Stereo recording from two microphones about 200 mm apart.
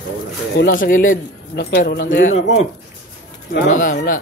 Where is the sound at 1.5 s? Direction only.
55° left (ahead or behind); by 2.6 s 40° left (ahead or behind).